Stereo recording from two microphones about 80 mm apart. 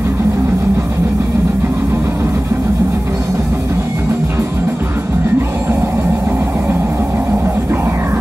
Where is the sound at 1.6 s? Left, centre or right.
Right.